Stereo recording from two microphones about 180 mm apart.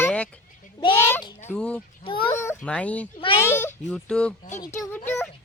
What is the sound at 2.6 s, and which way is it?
A child's voice, 5° left (ahead or behind).